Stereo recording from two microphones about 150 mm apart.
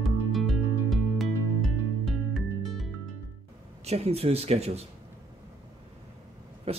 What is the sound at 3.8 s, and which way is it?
Speech, 45° right (ahead or behind).